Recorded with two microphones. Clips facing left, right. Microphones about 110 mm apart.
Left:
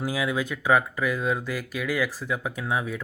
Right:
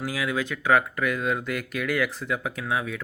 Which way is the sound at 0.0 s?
15° left (ahead or behind).